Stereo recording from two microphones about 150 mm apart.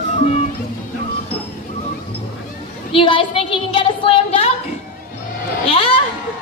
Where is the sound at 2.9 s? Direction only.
35° left (ahead or behind).